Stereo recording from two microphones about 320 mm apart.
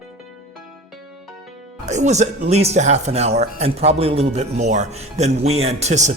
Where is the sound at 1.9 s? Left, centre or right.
Right.